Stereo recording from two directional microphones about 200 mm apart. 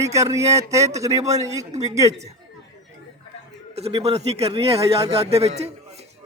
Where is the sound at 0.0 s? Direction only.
15° right (ahead or behind).